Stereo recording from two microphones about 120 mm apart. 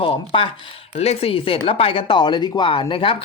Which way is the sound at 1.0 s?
60° left (ahead or behind).